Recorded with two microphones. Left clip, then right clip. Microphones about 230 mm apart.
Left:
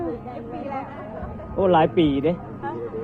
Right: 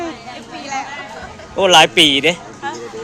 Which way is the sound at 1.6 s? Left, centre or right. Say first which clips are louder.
Right 8 dB; right.